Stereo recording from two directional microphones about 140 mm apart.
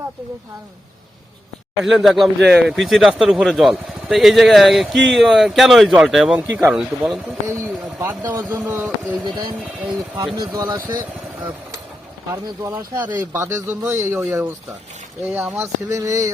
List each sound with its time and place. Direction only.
1.8 s speech: 5° right (ahead or behind)
7.4 s speech: 20° right (ahead or behind)
9.2 s speech: 30° right (ahead or behind)
12.3 s speech: 15° right (ahead or behind)